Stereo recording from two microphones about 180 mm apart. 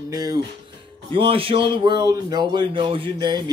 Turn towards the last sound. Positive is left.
turn(degrees=-25)  # may be behind; listen again after turning